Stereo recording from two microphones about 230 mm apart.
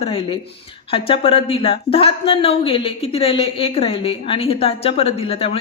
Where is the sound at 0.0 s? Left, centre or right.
Left.